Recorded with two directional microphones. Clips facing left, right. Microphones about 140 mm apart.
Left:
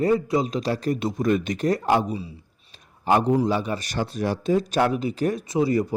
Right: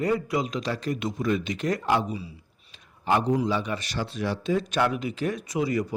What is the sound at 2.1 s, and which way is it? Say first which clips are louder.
Speech: left 4 dB; 25° left (ahead or behind).